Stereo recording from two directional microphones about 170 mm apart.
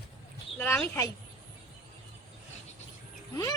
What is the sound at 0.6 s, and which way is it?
Speech, 15° left (ahead or behind).